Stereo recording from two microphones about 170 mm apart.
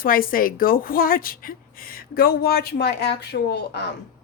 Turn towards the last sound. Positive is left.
turn(degrees=75)  # may be behind; listen again after turning